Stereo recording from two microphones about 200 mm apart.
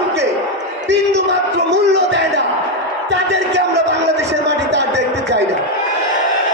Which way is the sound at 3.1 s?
60° right (ahead or behind).